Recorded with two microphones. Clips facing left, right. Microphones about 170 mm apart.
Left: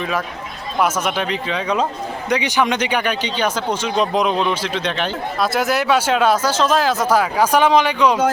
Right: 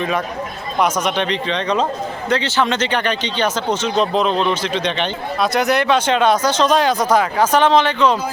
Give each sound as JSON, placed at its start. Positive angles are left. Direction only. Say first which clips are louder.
{"t": 0.8, "sound": "speech", "louder": "right 1 dB", "side_deg": 5}